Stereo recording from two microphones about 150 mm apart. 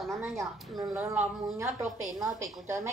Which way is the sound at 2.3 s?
20° right (ahead or behind).